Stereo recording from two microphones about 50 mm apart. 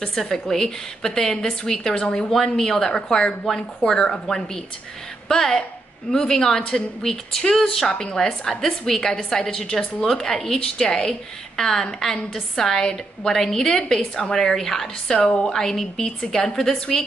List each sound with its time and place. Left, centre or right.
0.0 s a woman's voice: centre
15.1 s a woman's voice: left
15.4 s a woman's voice: centre